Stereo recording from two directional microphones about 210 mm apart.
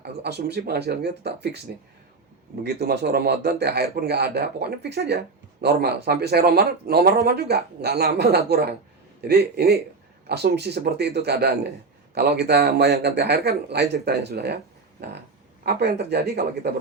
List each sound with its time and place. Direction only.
0.0 s speech: 50° right (ahead or behind)
2.6 s speech: 50° right (ahead or behind)
15.6 s speech: 50° right (ahead or behind)